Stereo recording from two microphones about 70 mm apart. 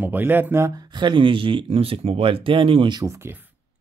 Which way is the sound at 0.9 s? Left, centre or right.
Right.